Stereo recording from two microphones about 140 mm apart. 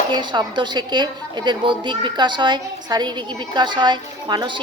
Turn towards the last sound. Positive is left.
turn(degrees=-35)  # may be behind; listen again after turning